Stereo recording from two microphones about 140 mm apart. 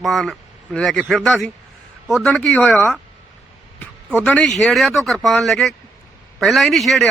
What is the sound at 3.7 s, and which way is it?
Speech, 10° left (ahead or behind).